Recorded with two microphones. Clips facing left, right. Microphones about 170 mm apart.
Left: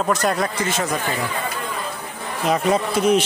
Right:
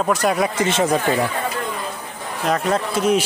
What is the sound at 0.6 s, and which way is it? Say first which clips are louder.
Speech: right 5 dB; 25° right (ahead or behind).